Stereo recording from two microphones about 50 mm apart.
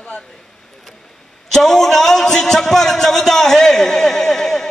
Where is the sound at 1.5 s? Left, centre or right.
Centre.